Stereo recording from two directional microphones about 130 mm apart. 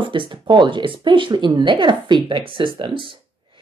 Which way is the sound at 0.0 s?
40° right (ahead or behind).